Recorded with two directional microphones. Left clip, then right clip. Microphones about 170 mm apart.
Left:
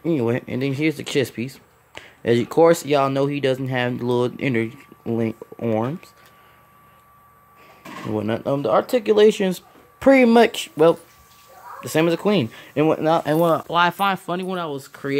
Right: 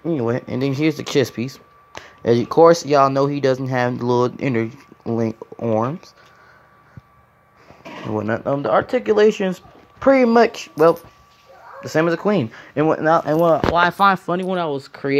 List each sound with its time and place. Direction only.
0.0 s speech: 20° left (ahead or behind)
0.4 s speech: centre (ahead or behind)
2.3 s speech: 30° left (ahead or behind)
2.9 s speech: 5° left (ahead or behind)
4.0 s speech: 25° left (ahead or behind)
4.4 s speech: 5° left (ahead or behind)
8.1 s speech: 15° left (ahead or behind)
13.9 s speech: 10° right (ahead or behind)
14.2 s speech: centre (ahead or behind)